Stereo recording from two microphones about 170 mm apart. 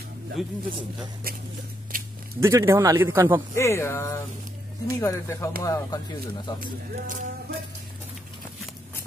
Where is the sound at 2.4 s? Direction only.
15° right (ahead or behind).